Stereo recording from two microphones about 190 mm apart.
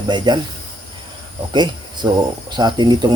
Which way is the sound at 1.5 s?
25° right (ahead or behind).